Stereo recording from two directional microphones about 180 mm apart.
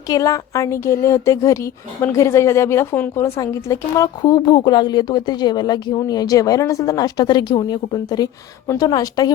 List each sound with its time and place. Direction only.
0.1 s speech: 20° left (ahead or behind)